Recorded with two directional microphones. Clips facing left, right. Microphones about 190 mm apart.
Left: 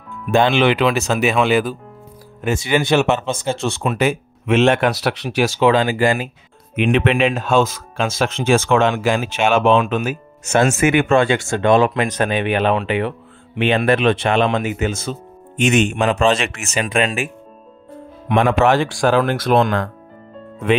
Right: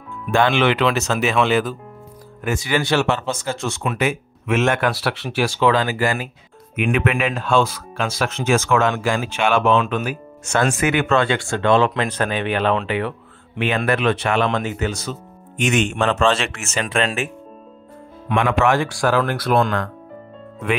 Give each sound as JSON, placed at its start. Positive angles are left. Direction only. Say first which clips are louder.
{"t": 0.3, "sound": "speech", "louder": "left 2 dB", "side_deg": 20}
{"t": 2.4, "sound": "speech", "louder": "left 3 dB", "side_deg": 25}
{"t": 18.3, "sound": "speech", "louder": "left 3 dB", "side_deg": 40}
{"t": 18.9, "sound": "speech", "louder": "left 3 dB", "side_deg": 25}